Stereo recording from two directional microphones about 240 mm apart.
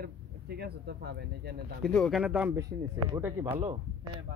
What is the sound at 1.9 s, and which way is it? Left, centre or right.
Speech, centre.